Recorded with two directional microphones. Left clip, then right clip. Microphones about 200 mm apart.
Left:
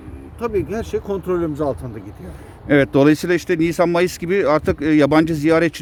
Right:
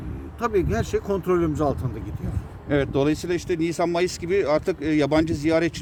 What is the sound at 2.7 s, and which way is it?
Speech, 60° left (ahead or behind).